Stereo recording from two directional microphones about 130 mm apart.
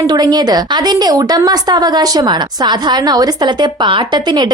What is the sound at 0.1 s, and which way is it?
A woman's voice, 30° right (ahead or behind).